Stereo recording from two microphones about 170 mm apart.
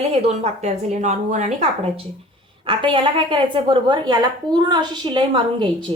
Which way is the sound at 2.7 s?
30° right (ahead or behind).